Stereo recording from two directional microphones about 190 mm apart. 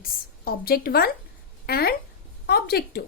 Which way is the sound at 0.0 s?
55° left (ahead or behind).